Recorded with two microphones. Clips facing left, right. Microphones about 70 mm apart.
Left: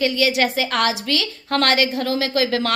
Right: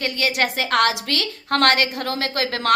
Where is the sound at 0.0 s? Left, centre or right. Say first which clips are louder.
Left 4 dB; right.